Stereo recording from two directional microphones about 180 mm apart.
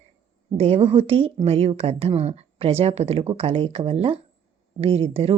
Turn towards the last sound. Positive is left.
turn(degrees=-35)  # may be behind; listen again after turning